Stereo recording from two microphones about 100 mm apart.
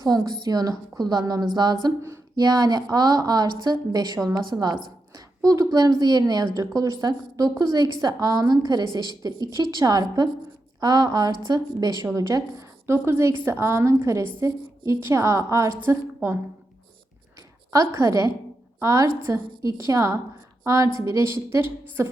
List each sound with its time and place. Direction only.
0.0 s a woman's voice: 40° right (ahead or behind); by 16.4 s 25° right (ahead or behind)
17.7 s a woman's voice: 35° right (ahead or behind)